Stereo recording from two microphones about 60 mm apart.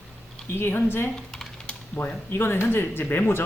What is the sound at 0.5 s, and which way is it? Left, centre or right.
Speech, left.